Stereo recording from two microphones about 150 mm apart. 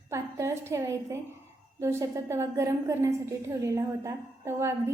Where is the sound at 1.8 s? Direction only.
20° right (ahead or behind).